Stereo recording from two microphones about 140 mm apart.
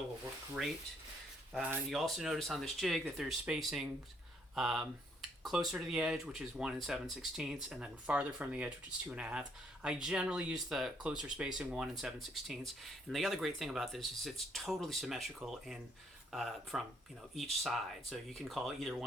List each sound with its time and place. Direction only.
1.5 s speech: 10° right (ahead or behind)
1.9 s speech: centre (ahead or behind)